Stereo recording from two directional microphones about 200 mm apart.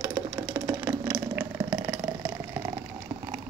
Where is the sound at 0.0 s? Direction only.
15° right (ahead or behind).